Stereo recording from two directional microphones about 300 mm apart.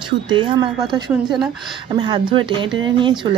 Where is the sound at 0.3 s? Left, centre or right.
Centre.